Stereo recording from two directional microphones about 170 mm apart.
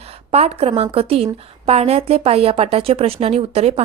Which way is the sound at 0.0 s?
35° right (ahead or behind).